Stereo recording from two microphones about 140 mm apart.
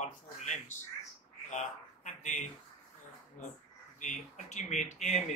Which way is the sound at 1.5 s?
60° left (ahead or behind).